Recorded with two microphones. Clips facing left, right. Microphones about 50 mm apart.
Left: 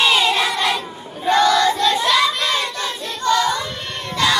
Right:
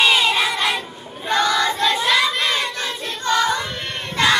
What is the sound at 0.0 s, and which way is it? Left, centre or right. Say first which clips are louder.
Child singing: even; centre.